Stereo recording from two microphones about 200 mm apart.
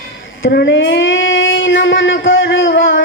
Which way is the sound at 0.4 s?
60° left (ahead or behind).